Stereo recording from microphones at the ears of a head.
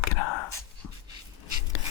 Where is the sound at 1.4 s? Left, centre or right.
Left.